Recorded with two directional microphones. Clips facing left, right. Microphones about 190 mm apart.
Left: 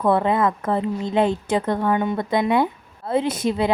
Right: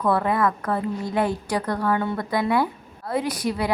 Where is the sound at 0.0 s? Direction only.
20° left (ahead or behind).